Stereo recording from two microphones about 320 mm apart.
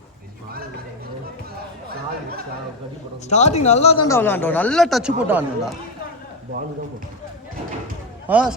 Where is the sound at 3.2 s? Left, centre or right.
Left.